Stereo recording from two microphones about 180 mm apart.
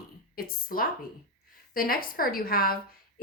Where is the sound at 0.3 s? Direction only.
55° left (ahead or behind).